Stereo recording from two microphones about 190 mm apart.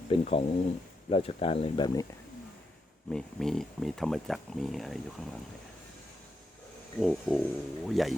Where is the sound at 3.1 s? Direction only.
5° left (ahead or behind).